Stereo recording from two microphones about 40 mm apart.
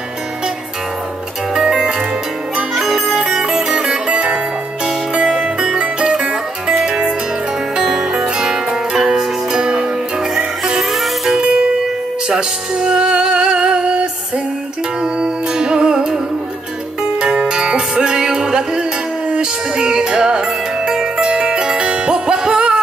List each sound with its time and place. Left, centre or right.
1.5 s music: centre
2.7 s music: centre
3.3 s music: centre
10.8 s music: centre
11.3 s music: right
15.5 s music: right
17.2 s music: right